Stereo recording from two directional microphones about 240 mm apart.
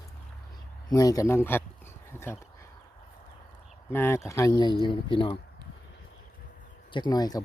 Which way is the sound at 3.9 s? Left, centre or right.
Centre.